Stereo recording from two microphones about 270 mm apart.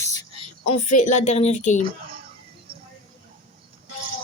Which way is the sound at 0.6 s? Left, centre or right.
Left.